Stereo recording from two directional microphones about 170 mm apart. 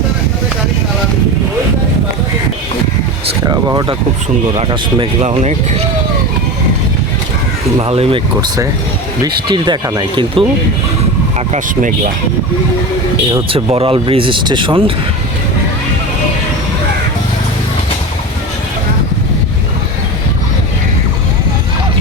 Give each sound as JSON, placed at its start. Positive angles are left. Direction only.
{"t": 3.5, "sound": "speech", "side_deg": -25}
{"t": 5.2, "sound": "speech", "side_deg": -40}
{"t": 7.8, "sound": "speech", "side_deg": -35}
{"t": 11.5, "sound": "speech", "side_deg": -50}
{"t": 13.5, "sound": "speech", "side_deg": -35}